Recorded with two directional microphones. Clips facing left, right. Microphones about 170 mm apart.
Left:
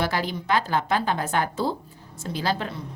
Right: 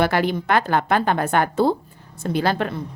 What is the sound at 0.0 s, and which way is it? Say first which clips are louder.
A woman's voice: right 7 dB; 60° right (ahead or behind).